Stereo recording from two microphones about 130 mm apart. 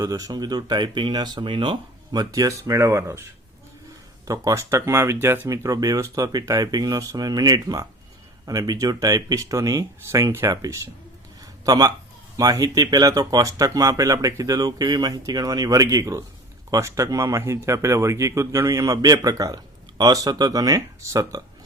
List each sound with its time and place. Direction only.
0.0 s speech: 25° right (ahead or behind)
4.3 s speech: 25° right (ahead or behind)
11.3 s a sound: 30° right (ahead or behind)
12.4 s speech: 30° right (ahead or behind)